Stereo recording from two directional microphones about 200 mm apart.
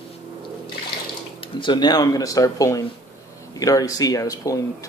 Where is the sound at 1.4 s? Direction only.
25° left (ahead or behind).